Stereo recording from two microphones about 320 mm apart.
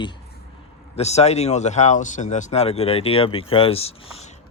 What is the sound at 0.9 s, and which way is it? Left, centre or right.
Speech, centre.